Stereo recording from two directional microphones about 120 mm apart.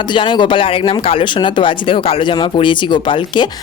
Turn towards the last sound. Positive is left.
turn(degrees=40)  # may be behind; listen again after turning